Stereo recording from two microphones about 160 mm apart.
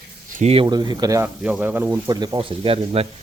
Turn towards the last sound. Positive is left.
turn(degrees=-35)  # may be behind; listen again after turning